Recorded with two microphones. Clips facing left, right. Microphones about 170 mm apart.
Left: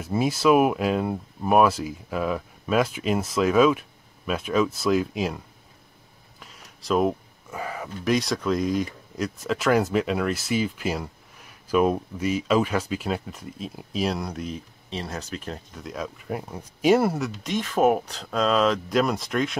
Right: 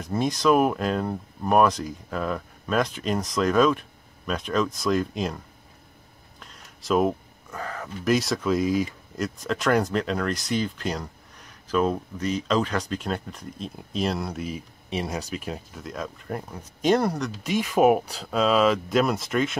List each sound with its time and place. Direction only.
0.0 s speech: 5° left (ahead or behind)
6.4 s a sound: centre (ahead or behind)
7.5 s speech: 10° left (ahead or behind)
8.0 s speech: centre (ahead or behind)